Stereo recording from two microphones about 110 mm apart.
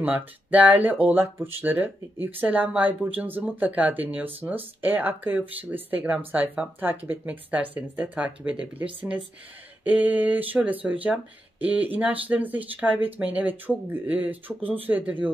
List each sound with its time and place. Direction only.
0.0 s speech: 15° right (ahead or behind)